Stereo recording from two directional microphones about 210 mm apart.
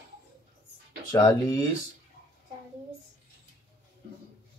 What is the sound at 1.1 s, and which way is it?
Speech, 20° left (ahead or behind).